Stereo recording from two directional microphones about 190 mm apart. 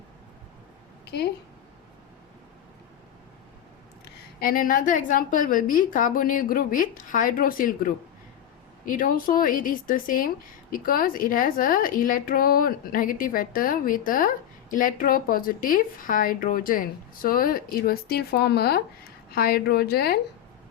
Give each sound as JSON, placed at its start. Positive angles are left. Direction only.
{"t": 4.4, "sound": "a woman's voice", "side_deg": 50}